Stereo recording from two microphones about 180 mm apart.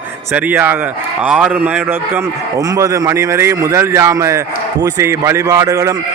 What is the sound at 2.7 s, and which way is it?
A man's voice, 15° right (ahead or behind).